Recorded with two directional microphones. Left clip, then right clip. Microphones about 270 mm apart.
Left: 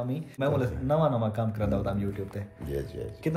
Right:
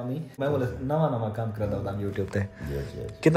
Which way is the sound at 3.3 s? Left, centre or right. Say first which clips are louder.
Right 10 dB; right.